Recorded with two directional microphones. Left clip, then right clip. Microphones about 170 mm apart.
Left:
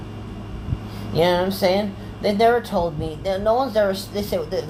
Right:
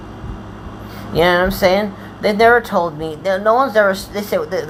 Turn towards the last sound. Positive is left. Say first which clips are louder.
# right 5 dB
turn(degrees=-15)  # may be behind; listen again after turning